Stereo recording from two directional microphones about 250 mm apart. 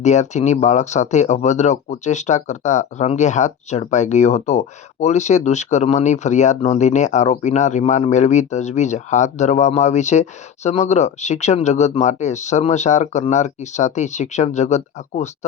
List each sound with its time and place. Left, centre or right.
0.0 s speech: left